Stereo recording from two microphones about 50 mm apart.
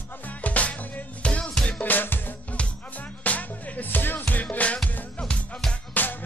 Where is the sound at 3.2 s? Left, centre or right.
Left.